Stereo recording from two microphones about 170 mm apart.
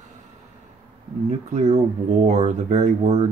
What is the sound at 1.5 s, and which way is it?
Speech, 40° right (ahead or behind).